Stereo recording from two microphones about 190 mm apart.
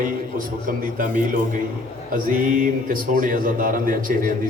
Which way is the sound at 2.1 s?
45° right (ahead or behind).